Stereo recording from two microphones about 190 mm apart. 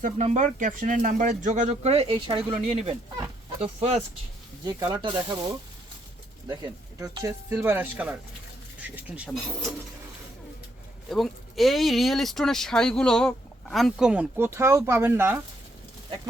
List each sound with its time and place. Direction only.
0.0 s speech: 40° right (ahead or behind)
4.6 s speech: 20° right (ahead or behind); by 9.6 s centre (ahead or behind)
11.1 s speech: centre (ahead or behind)